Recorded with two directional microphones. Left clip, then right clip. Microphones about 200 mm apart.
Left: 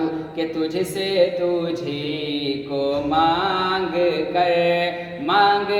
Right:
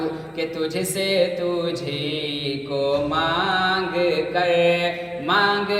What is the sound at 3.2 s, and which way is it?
Music, 20° left (ahead or behind).